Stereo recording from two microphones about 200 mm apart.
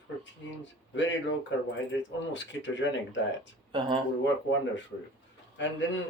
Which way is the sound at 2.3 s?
65° left (ahead or behind).